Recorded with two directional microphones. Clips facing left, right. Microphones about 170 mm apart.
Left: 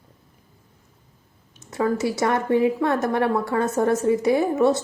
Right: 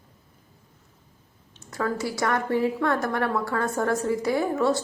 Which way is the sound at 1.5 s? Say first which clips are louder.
Left 5 dB; 20° left (ahead or behind).